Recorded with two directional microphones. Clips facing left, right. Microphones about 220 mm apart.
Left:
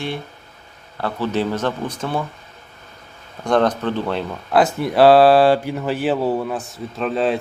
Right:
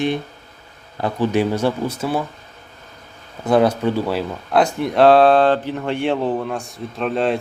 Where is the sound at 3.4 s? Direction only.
5° right (ahead or behind).